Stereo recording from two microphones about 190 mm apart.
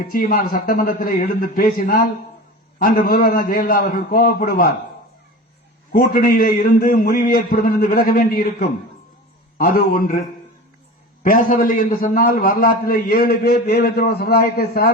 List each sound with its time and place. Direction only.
0.0 s a man's voice: 50° left (ahead or behind)
5.9 s a man's voice: 50° left (ahead or behind)